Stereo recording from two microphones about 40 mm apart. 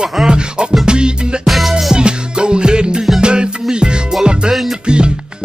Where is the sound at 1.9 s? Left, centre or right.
Right.